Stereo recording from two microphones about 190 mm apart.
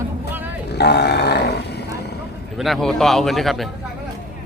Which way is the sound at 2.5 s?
Centre (ahead or behind).